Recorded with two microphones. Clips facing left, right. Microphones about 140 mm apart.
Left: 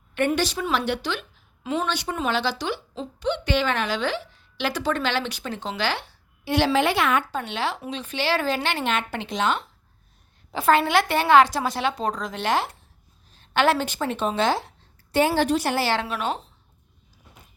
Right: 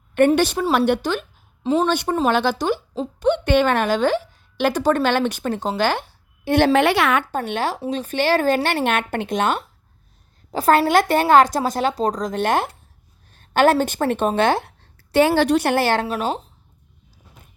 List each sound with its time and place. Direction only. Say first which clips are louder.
0.3 s a woman's voice: right 6 dB; 55° right (ahead or behind)
1.6 s a woman's voice: right 8 dB; 30° right (ahead or behind)
1.9 s a woman's voice: right 7 dB; 50° right (ahead or behind); by 7.3 s 75° right (ahead or behind)
7.3 s a woman's voice: right 4 dB; 50° right (ahead or behind)
10.5 s a woman's voice: right 4 dB; 40° right (ahead or behind); by 14.7 s 60° right (ahead or behind)
15.1 s a woman's voice: right 5 dB; 75° right (ahead or behind); by 16.0 s 50° right (ahead or behind)
16.0 s speech: right 4 dB; 35° right (ahead or behind)